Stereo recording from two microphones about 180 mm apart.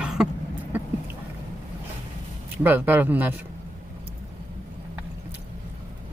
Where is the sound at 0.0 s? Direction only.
5° right (ahead or behind).